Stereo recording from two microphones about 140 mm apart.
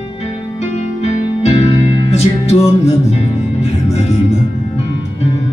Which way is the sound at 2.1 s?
50° left (ahead or behind).